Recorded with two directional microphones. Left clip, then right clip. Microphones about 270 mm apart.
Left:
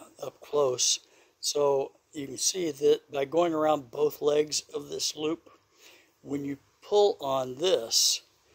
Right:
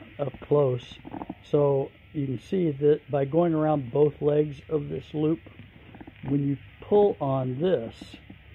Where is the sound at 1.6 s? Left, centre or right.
Centre.